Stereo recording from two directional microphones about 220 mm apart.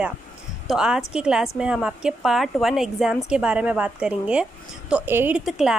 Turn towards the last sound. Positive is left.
turn(degrees=-5)  # may be behind; listen again after turning